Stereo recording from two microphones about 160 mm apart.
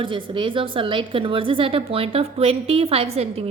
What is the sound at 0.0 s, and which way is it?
A woman's voice, 30° right (ahead or behind).